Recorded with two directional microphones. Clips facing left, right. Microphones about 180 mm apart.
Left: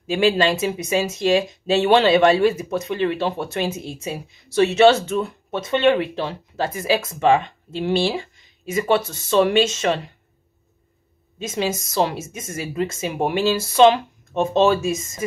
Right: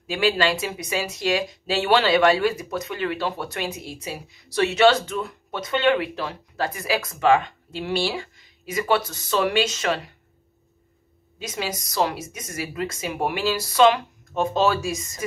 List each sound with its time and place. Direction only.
0.0 s speech: 25° left (ahead or behind)
11.3 s speech: 25° left (ahead or behind)